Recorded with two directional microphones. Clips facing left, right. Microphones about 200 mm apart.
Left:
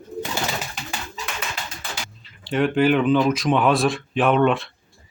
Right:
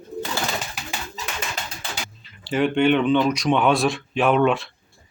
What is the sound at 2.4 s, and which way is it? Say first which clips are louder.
Speech: even; centre (ahead or behind).